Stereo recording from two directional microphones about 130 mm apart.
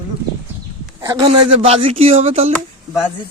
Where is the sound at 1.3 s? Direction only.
50° right (ahead or behind).